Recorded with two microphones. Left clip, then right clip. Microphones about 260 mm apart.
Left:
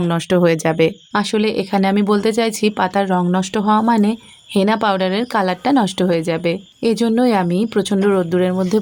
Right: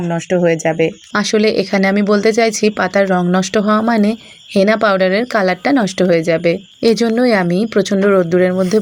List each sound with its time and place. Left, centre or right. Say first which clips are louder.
0.1 s speech: right 2 dB; centre
1.1 s speech: right 4 dB; centre